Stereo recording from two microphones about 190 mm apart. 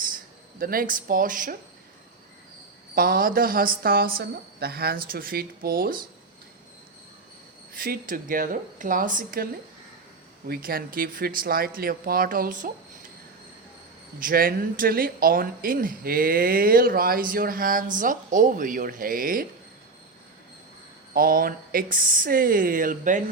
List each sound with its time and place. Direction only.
0.6 s speech: 50° right (ahead or behind)
2.9 s speech: 50° right (ahead or behind)
7.7 s speech: 50° right (ahead or behind)
10.5 s speech: 50° right (ahead or behind)
14.2 s speech: 50° right (ahead or behind)
21.1 s speech: 50° right (ahead or behind)